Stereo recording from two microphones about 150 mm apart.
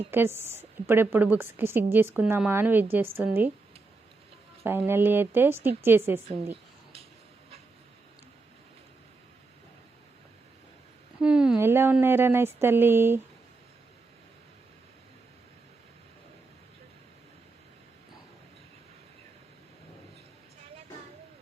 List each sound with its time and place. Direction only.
0.1 s a woman's voice: 15° right (ahead or behind)
4.6 s a woman's voice: 15° right (ahead or behind)
6.2 s a sound: 40° right (ahead or behind)
11.2 s speech: 5° right (ahead or behind)